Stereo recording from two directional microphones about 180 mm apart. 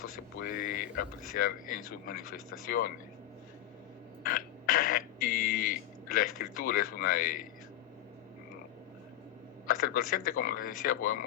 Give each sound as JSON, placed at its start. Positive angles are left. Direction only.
{"t": 0.0, "sound": "speech", "side_deg": 50}
{"t": 4.2, "sound": "speech", "side_deg": 50}
{"t": 9.6, "sound": "speech", "side_deg": 50}